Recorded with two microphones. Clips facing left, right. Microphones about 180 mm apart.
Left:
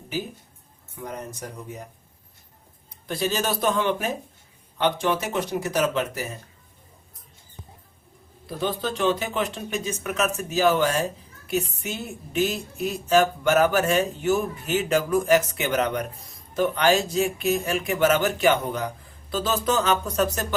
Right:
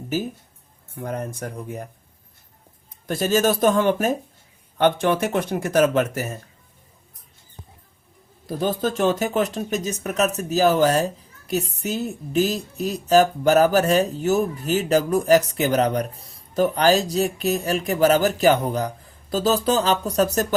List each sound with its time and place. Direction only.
0.1 s speech: 45° right (ahead or behind)
0.9 s speech: 55° right (ahead or behind)
3.1 s speech: 45° right (ahead or behind)
8.4 s speech: 45° right (ahead or behind)